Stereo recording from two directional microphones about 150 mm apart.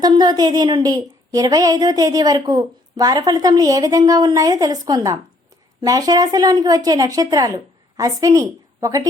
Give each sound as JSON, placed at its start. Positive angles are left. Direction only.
{"t": 0.0, "sound": "a woman's voice", "side_deg": -25}